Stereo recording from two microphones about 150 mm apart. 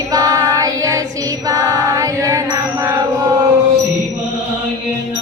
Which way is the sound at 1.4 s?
25° right (ahead or behind).